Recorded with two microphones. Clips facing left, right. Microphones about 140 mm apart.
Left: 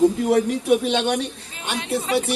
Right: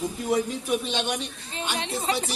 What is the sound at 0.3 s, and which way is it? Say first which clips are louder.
Speech: left 7 dB; 70° left (ahead or behind).